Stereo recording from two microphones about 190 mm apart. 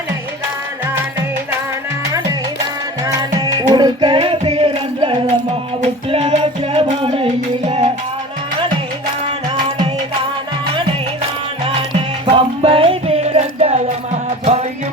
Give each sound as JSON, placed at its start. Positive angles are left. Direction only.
{"t": 3.0, "sound": "music", "side_deg": -20}
{"t": 11.6, "sound": "music", "side_deg": -30}